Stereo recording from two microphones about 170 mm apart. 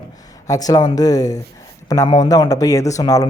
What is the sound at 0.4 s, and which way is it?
Speech, 20° left (ahead or behind).